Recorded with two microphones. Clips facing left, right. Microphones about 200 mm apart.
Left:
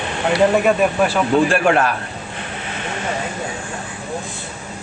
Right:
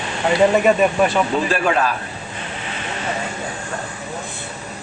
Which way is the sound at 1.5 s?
55° left (ahead or behind).